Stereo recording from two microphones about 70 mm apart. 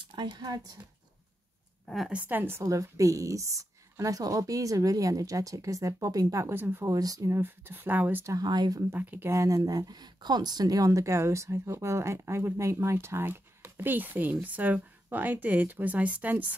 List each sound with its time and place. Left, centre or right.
0.2 s speech: right
2.0 s speech: right
2.6 s speech: right
6.5 s speech: right
6.9 s speech: right
7.2 s speech: right
8.3 s speech: right
8.9 s speech: right
9.3 s speech: right